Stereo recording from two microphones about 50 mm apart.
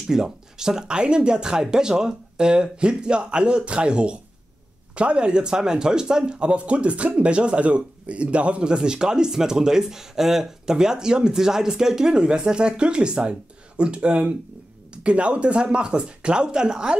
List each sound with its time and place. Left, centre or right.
0.0 s speech: centre